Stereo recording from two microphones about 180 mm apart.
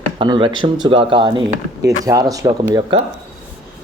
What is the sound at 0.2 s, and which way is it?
Speech, 25° right (ahead or behind).